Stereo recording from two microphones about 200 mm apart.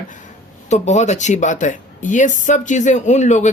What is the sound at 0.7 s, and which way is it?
Speech, 35° left (ahead or behind).